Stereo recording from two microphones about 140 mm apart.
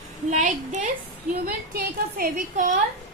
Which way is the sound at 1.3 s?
90° right.